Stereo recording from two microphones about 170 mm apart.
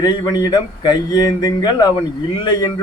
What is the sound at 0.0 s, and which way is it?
A man's voice, 25° left (ahead or behind).